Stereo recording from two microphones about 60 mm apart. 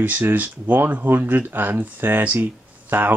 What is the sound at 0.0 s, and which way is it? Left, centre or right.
Speech, right.